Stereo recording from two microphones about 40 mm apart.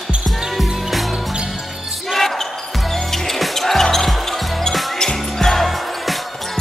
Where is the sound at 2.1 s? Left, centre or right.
Centre.